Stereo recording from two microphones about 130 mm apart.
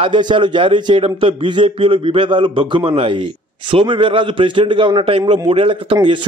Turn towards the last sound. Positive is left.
turn(degrees=-45)  # may be behind; listen again after turning